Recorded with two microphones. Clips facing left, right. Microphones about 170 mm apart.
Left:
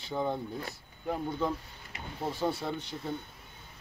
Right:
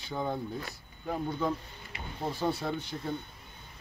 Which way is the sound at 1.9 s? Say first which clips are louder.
Even; 40° left (ahead or behind).